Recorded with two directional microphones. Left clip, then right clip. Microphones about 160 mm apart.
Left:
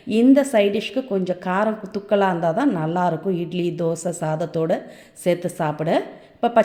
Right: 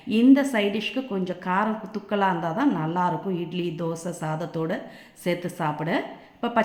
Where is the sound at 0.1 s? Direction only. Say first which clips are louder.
Left 4 dB; 25° left (ahead or behind).